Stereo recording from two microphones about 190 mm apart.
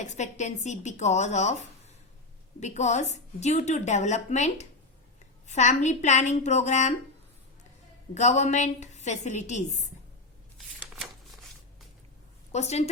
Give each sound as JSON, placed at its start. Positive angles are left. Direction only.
{"t": 0.0, "sound": "a woman's voice", "side_deg": 40}
{"t": 2.6, "sound": "a woman's voice", "side_deg": 35}
{"t": 8.1, "sound": "a woman's voice", "side_deg": 40}
{"t": 12.5, "sound": "a woman's voice", "side_deg": 35}